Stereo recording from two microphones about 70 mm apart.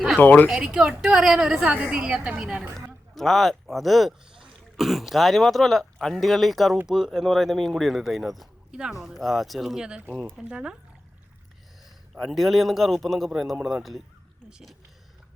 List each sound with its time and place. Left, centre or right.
0.2 s speech: left
0.4 s a woman's voice: centre
2.7 s a man's voice: centre
12.2 s a man's voice: centre